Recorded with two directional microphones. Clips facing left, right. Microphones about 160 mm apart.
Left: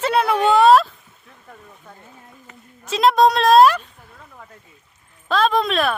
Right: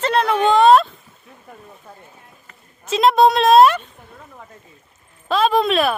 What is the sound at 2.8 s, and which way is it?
A woman's voice, centre (ahead or behind).